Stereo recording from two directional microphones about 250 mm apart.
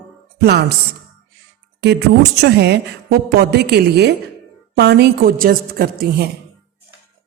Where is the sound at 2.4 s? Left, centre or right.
Right.